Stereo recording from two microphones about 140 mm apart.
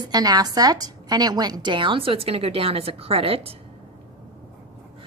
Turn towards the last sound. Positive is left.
turn(degrees=-45)  # may be behind; listen again after turning